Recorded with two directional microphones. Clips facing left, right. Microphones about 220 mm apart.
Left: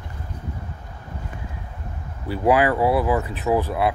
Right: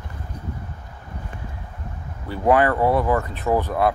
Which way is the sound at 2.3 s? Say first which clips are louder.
Even; 10° left (ahead or behind).